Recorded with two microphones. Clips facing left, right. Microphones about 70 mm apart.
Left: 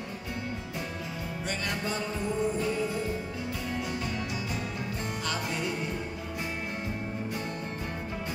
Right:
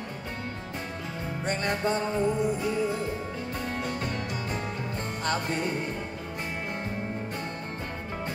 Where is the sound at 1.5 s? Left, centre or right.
Right.